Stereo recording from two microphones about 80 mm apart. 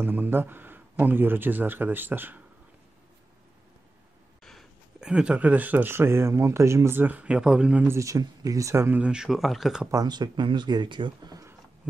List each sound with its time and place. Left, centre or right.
0.0 s a man's voice: right
5.0 s a man's voice: centre; by 7.0 s right
7.0 s speech: right
8.0 s speech: right
8.9 s speech: centre
10.0 s speech: right
11.8 s a sound: centre